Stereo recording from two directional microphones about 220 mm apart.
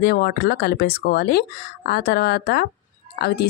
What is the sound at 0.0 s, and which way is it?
Speech, 45° left (ahead or behind).